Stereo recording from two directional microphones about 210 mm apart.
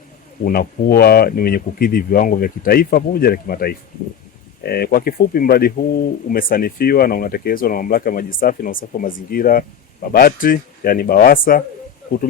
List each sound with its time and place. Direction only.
0.4 s speech: 45° left (ahead or behind)